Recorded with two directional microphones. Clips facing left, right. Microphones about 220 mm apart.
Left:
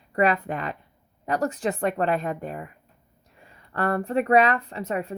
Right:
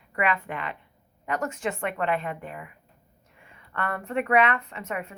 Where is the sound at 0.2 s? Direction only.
40° left (ahead or behind).